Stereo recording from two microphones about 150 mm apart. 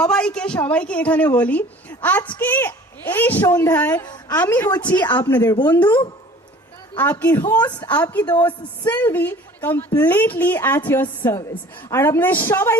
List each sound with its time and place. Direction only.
0.0 s a woman's voice: 5° left (ahead or behind)
4.0 s a woman's voice: 30° left (ahead or behind)
4.4 s a woman's voice: 15° left (ahead or behind)
5.4 s a woman's voice: 25° left (ahead or behind)
6.9 s a woman's voice: 10° left (ahead or behind)
7.7 s a woman's voice: 30° left (ahead or behind)
8.0 s a woman's voice: 10° left (ahead or behind)